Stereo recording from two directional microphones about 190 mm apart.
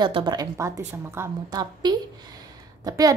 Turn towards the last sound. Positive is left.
turn(degrees=-20)  # may be behind; listen again after turning